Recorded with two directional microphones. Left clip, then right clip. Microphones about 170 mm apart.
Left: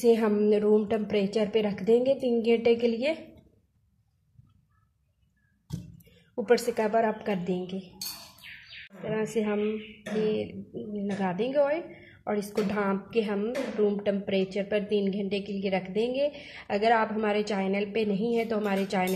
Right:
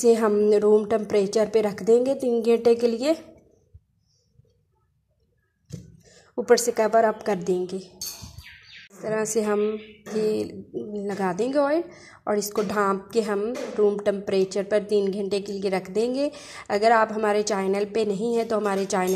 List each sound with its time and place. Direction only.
0.0 s a woman's voice: 30° right (ahead or behind)
6.3 s a woman's voice: 35° right (ahead or behind)
9.1 s a woman's voice: 35° right (ahead or behind)